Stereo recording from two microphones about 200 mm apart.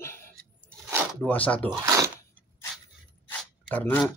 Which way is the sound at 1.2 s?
10° left (ahead or behind).